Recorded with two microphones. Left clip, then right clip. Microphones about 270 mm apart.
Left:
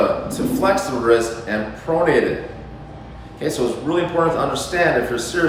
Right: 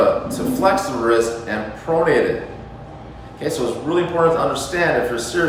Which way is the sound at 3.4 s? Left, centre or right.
Centre.